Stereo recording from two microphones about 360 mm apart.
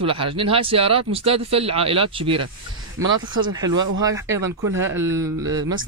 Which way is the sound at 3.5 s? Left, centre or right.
Centre.